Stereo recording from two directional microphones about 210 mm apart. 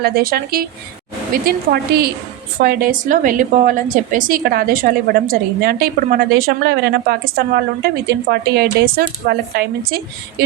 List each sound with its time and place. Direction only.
0.0 s a woman's voice: 45° right (ahead or behind)